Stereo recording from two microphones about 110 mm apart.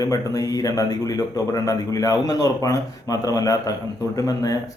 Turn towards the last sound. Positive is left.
turn(degrees=30)  # may be behind; listen again after turning